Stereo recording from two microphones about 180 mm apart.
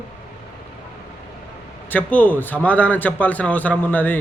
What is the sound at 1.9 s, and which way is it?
A man's voice, 10° left (ahead or behind).